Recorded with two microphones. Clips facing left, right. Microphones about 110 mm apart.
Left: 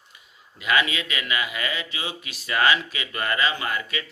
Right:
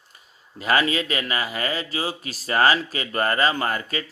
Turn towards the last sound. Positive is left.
turn(degrees=-40)  # may be behind; listen again after turning